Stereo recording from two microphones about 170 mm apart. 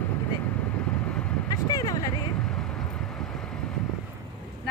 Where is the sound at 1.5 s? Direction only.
20° left (ahead or behind).